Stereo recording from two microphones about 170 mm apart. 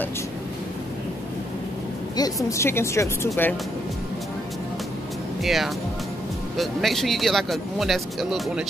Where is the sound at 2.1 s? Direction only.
20° left (ahead or behind).